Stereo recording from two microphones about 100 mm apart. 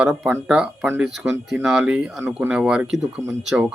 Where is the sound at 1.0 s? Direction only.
5° right (ahead or behind).